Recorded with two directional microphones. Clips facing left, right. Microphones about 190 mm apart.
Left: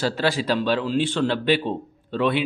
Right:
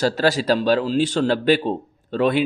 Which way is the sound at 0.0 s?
40° right (ahead or behind).